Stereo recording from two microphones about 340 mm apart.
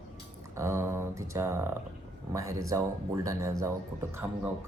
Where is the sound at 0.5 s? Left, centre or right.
Centre.